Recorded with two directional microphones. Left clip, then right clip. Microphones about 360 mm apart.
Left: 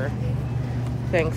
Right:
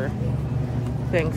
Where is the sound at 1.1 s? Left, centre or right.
Centre.